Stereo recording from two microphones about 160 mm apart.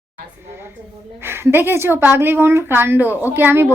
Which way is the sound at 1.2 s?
15° right (ahead or behind).